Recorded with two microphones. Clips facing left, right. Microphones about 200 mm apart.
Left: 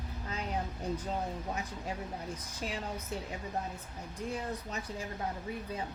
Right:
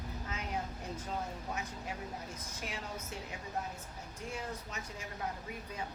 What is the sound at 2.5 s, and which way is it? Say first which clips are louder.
Speech: left 5 dB; 35° left (ahead or behind).